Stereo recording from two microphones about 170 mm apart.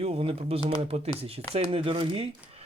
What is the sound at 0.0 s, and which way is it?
Speech, 35° right (ahead or behind).